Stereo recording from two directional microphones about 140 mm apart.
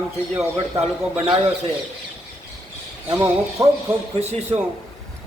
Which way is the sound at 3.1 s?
20° right (ahead or behind).